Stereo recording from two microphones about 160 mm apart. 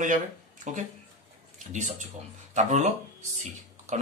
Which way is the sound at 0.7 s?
50° right (ahead or behind).